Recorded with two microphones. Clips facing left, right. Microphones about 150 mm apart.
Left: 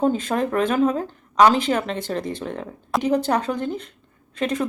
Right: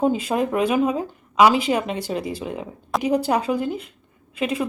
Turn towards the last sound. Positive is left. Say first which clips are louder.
# even
turn(degrees=-5)  # may be behind; listen again after turning